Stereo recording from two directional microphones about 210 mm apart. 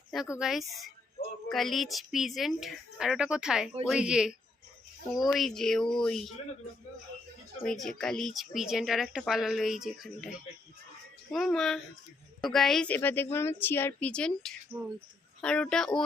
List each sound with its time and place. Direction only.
0.3 s speech: centre (ahead or behind)
7.6 s a woman's voice: centre (ahead or behind)